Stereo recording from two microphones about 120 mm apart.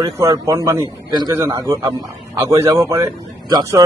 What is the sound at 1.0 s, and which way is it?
Speech, 35° right (ahead or behind).